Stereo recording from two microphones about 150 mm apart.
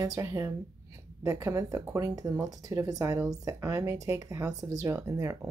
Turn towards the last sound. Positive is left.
turn(degrees=-20)  # may be behind; listen again after turning